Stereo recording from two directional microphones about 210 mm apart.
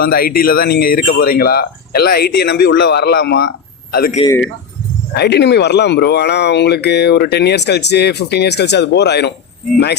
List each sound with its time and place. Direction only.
0.0 s speech: 45° left (ahead or behind)
4.2 s speech: 25° left (ahead or behind)
5.1 s speech: 50° left (ahead or behind)